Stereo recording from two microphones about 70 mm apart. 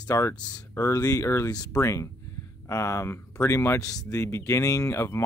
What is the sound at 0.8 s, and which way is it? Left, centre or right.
Speech, left.